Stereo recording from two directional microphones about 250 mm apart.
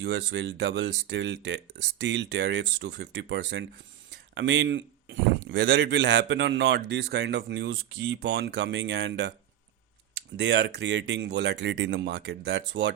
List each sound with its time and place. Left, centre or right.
0.0 s speech: right
10.3 s speech: right